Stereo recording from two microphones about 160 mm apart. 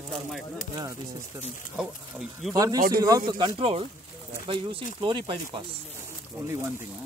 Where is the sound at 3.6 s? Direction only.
40° right (ahead or behind).